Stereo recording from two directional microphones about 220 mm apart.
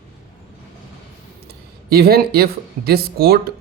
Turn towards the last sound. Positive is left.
turn(degrees=-45)  # may be behind; listen again after turning